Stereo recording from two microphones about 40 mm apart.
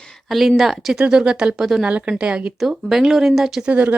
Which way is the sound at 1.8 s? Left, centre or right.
Right.